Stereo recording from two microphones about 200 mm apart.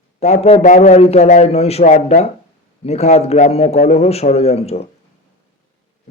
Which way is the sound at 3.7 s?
50° left (ahead or behind).